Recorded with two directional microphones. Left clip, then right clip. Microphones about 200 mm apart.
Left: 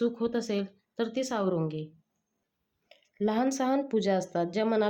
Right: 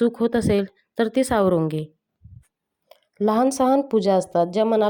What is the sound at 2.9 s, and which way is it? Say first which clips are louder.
A woman's voice: right 9 dB; 30° right (ahead or behind).